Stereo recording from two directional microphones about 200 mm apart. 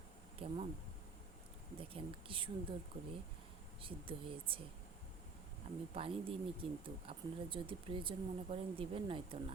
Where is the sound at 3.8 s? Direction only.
25° right (ahead or behind).